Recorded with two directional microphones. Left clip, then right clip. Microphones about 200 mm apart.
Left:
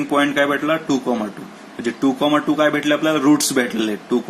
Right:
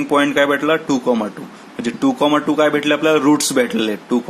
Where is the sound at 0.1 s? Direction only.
30° right (ahead or behind).